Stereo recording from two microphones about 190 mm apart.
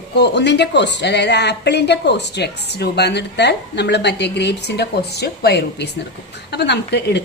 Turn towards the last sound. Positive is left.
turn(degrees=60)  # may be behind; listen again after turning